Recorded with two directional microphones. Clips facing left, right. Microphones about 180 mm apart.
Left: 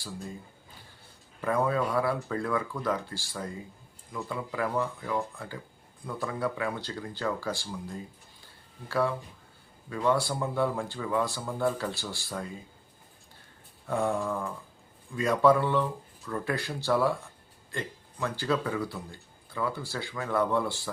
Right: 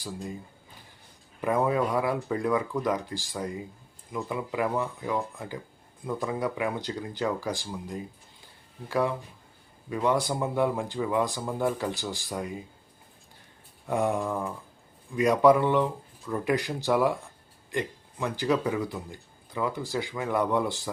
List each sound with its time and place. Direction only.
1.4 s speech: 15° right (ahead or behind)
13.8 s speech: 15° right (ahead or behind)